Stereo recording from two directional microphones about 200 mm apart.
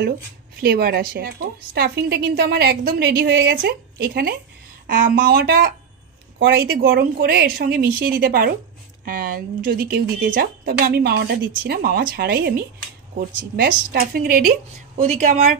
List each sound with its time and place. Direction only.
0.6 s a woman's voice: 50° right (ahead or behind)
15.0 s speech: 35° right (ahead or behind)